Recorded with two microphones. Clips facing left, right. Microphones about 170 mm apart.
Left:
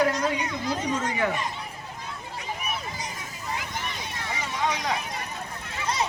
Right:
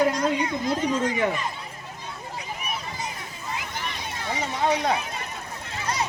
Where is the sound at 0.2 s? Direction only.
30° right (ahead or behind).